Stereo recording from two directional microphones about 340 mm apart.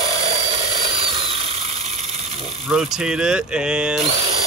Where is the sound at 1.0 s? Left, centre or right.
Centre.